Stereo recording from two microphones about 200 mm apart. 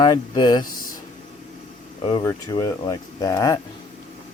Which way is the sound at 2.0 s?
20° left (ahead or behind).